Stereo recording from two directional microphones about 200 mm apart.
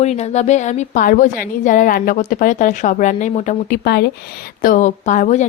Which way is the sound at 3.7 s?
55° left (ahead or behind).